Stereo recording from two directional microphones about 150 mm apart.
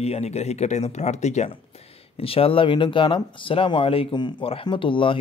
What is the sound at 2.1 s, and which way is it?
Speech, 40° left (ahead or behind).